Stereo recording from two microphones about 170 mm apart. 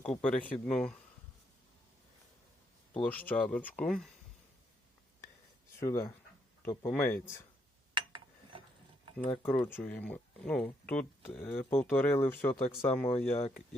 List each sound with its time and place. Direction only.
0.0 s speech: 10° left (ahead or behind)
3.0 s speech: 10° left (ahead or behind)
5.8 s speech: 15° left (ahead or behind)
7.9 s a sound: 30° right (ahead or behind)
9.4 s speech: 10° left (ahead or behind)